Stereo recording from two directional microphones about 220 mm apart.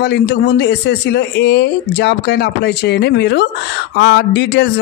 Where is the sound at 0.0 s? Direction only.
50° left (ahead or behind).